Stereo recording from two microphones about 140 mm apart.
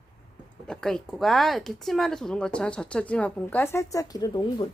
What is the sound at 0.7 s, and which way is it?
A woman's voice, 5° left (ahead or behind).